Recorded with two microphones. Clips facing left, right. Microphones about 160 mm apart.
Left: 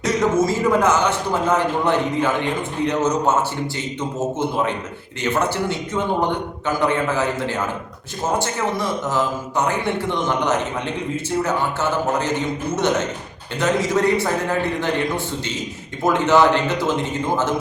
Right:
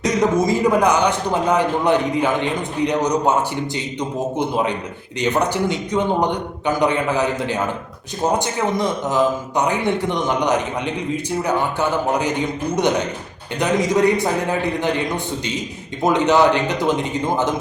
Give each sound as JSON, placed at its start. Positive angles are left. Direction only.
{"t": 0.0, "sound": "a man's voice", "side_deg": -15}
{"t": 4.4, "sound": "a man's voice", "side_deg": -15}